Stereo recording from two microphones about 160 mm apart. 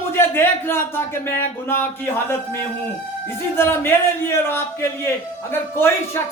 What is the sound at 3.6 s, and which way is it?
A man's voice, 15° left (ahead or behind).